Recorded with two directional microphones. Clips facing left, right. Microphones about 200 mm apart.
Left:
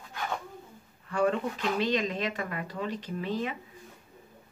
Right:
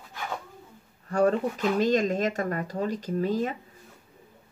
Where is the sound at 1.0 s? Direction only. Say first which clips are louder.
Right 4 dB; 40° right (ahead or behind).